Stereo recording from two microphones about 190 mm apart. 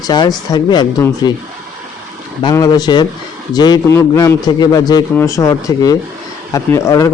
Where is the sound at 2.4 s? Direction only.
20° left (ahead or behind).